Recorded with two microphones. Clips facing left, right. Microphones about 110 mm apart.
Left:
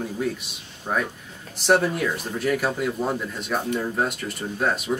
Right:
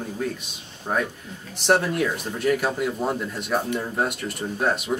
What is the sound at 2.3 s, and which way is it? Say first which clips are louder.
Speech: right 2 dB; centre (ahead or behind).